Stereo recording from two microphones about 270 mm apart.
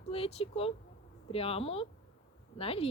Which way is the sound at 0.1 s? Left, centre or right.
Left.